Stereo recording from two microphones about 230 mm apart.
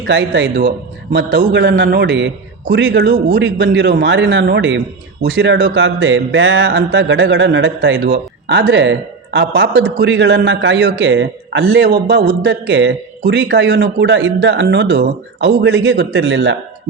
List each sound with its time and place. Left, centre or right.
0.1 s speech: right